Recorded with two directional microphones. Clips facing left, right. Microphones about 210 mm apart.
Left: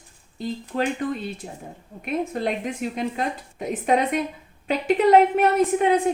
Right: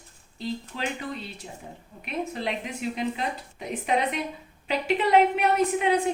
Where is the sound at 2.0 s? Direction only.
50° left (ahead or behind).